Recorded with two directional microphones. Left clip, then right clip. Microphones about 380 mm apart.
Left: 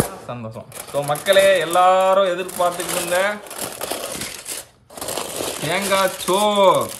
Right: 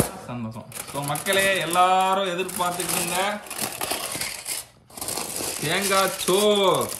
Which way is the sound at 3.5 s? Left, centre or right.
Centre.